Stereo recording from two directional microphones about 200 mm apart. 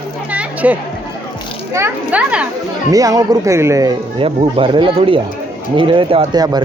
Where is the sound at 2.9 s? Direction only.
15° right (ahead or behind).